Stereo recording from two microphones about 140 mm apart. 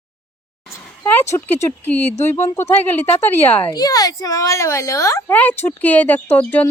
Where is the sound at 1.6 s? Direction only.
15° left (ahead or behind).